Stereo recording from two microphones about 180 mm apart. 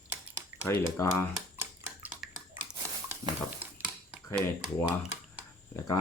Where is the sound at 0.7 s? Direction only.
15° left (ahead or behind).